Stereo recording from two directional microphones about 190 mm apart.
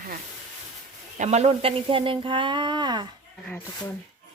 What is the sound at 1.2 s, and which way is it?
Speech, 35° right (ahead or behind).